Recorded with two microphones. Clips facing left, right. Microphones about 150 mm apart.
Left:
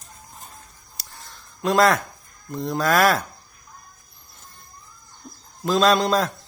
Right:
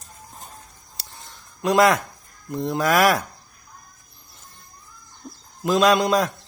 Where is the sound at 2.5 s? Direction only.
20° right (ahead or behind).